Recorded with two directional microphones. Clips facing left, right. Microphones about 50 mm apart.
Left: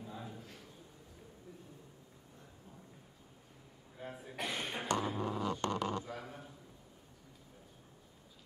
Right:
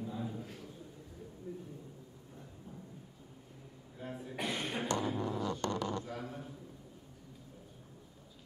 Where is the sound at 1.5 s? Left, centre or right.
Right.